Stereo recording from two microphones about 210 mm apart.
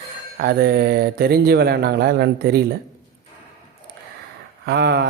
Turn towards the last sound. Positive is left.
turn(degrees=-50)  # may be behind; listen again after turning